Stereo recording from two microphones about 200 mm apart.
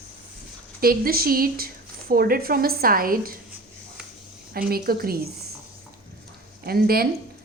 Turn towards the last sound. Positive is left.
turn(degrees=-50)  # may be behind; listen again after turning